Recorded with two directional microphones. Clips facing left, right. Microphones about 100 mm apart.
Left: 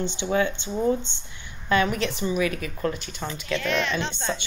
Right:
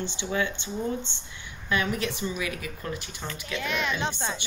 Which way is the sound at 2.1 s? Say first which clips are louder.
Left 6 dB; 20° left (ahead or behind).